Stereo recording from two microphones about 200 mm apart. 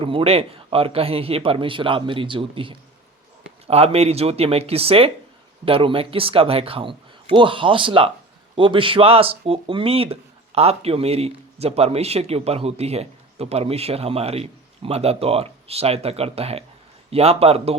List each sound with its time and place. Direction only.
0.0 s speech: 25° right (ahead or behind)